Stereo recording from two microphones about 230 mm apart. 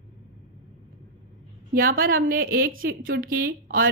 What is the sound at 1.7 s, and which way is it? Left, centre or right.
A woman's voice, right.